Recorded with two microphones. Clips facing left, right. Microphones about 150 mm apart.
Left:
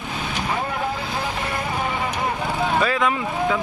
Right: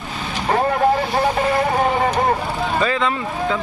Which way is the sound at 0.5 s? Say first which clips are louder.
Right 12 dB; 50° right (ahead or behind).